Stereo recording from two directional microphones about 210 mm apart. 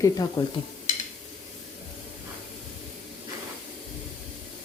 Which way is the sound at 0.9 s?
35° left (ahead or behind).